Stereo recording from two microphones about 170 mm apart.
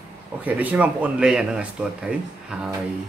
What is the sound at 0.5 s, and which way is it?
Speech, 10° right (ahead or behind).